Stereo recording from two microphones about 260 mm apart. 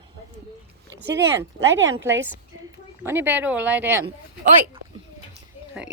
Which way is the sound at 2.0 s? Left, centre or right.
Centre.